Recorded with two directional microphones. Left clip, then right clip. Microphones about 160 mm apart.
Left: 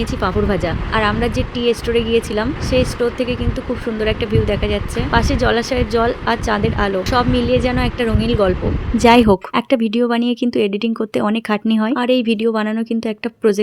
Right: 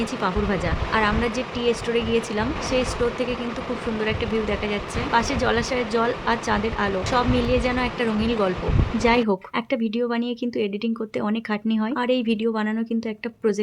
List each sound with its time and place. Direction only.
0.2 s speech: 30° left (ahead or behind)
9.0 s a woman's voice: 50° left (ahead or behind)